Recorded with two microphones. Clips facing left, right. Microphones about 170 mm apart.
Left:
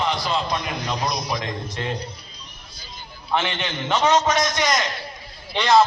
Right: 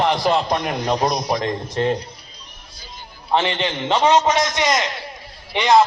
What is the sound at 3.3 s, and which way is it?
A man's voice, 35° right (ahead or behind).